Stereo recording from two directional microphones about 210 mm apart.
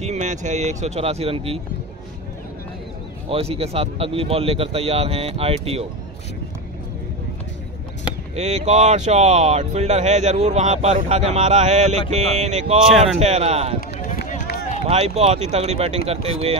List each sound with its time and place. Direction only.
0.0 s speech: 35° right (ahead or behind)
3.3 s a man's voice: 30° right (ahead or behind)
8.4 s a man's voice: 35° right (ahead or behind)
13.7 s run: 40° left (ahead or behind)
14.9 s a man's voice: 30° right (ahead or behind)